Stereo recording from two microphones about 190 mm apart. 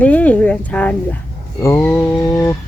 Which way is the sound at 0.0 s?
5° left (ahead or behind).